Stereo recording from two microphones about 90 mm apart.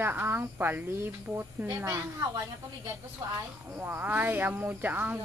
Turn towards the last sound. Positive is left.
turn(degrees=-20)  # may be behind; listen again after turning